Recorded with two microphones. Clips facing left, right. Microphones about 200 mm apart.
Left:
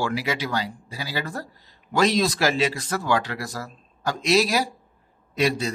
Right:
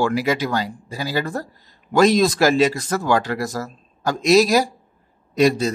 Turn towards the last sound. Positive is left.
turn(degrees=-45)  # may be behind; listen again after turning